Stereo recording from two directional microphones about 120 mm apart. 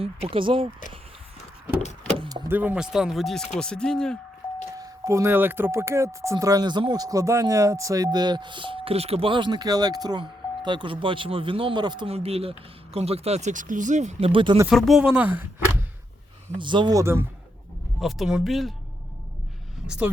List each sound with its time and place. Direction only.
0.0 s speech: 50° right (ahead or behind)
2.5 s speech: 15° right (ahead or behind); by 4.2 s 5° left (ahead or behind)
4.8 s speech: 25° right (ahead or behind)
12.0 s speech: 60° right (ahead or behind)
14.7 s speech: centre (ahead or behind)
16.6 s speech: 40° right (ahead or behind)
17.0 s speech: 20° right (ahead or behind)
18.0 s speech: 5° right (ahead or behind)